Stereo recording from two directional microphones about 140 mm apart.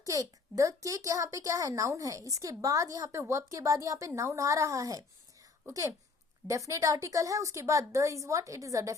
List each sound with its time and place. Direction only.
0.0 s a woman's voice: 25° right (ahead or behind)